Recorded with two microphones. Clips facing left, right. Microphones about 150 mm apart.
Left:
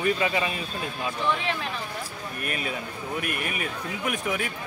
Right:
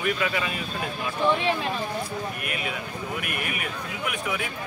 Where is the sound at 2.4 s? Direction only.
35° left (ahead or behind).